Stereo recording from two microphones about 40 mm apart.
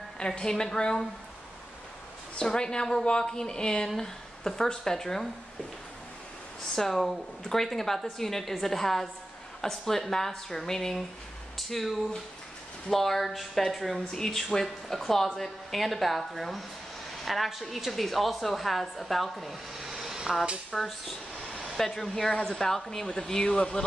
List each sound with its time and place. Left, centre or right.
0.3 s speech: centre
2.3 s speech: left
6.7 s a woman's voice: centre
20.1 s a sound: centre
20.7 s speech: centre; by 23.9 s left